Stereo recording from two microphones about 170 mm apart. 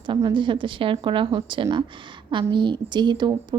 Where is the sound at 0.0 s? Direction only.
30° right (ahead or behind).